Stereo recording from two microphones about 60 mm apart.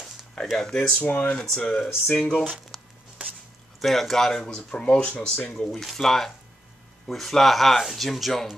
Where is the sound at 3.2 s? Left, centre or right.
Right.